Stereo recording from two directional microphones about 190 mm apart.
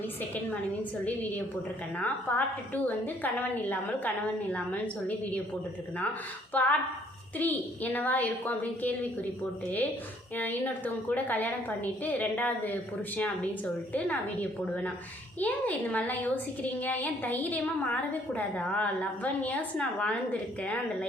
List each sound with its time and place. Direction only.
0.2 s a woman's voice: 10° left (ahead or behind)
6.5 s a woman's voice: 10° left (ahead or behind)
10.3 s a woman's voice: 10° left (ahead or behind)
15.4 s a woman's voice: 10° left (ahead or behind)